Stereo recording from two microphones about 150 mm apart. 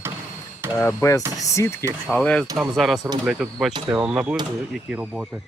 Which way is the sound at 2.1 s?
5° left (ahead or behind).